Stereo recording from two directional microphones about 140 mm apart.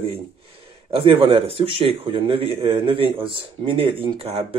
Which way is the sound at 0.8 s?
40° right (ahead or behind).